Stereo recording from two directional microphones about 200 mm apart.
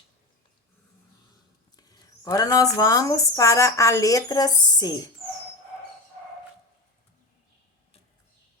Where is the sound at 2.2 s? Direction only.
20° left (ahead or behind).